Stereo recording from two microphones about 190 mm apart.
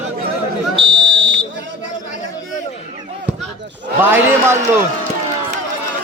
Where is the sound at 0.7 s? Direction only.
25° right (ahead or behind).